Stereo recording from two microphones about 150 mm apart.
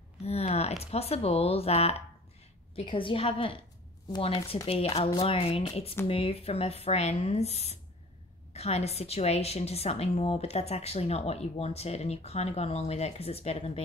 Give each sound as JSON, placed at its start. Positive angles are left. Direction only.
{"t": 0.2, "sound": "a woman's voice", "side_deg": 45}